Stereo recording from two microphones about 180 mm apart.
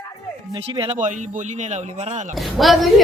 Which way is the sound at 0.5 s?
30° right (ahead or behind).